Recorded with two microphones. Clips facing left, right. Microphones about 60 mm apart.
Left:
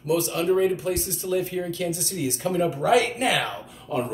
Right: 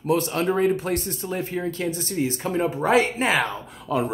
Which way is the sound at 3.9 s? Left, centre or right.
Right.